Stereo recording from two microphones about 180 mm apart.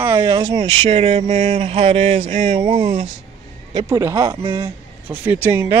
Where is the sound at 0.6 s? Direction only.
30° right (ahead or behind).